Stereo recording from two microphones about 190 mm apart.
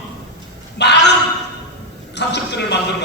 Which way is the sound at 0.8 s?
65° left (ahead or behind).